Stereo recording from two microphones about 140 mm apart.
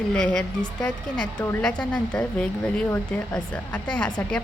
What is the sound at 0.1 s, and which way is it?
A woman's voice, 5° left (ahead or behind).